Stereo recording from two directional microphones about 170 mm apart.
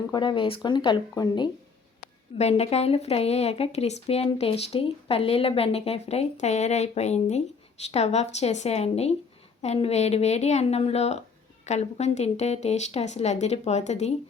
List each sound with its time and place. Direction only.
0.1 s speech: 30° left (ahead or behind)
2.4 s speech: 40° left (ahead or behind)